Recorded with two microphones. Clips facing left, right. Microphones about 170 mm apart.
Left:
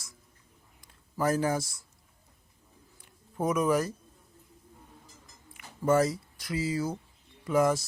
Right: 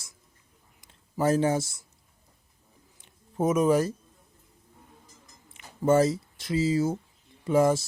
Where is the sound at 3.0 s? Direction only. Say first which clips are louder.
Right 4 dB; 25° right (ahead or behind).